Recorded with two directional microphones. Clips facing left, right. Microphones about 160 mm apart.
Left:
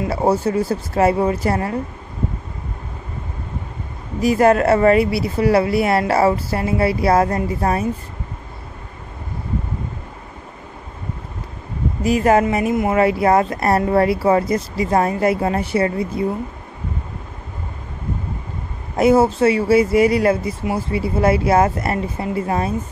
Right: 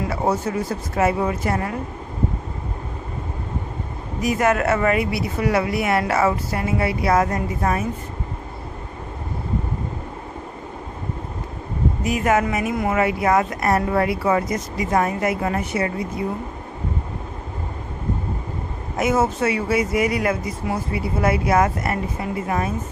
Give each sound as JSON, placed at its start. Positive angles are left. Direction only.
{"t": 0.1, "sound": "speech", "side_deg": 30}
{"t": 4.2, "sound": "speech", "side_deg": 35}
{"t": 12.0, "sound": "speech", "side_deg": 30}
{"t": 18.9, "sound": "speech", "side_deg": 30}